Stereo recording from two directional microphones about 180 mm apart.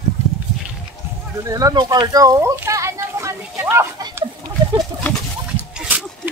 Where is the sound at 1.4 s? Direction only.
20° right (ahead or behind).